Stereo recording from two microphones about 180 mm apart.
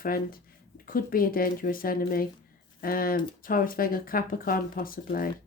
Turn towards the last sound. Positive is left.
turn(degrees=55)  # may be behind; listen again after turning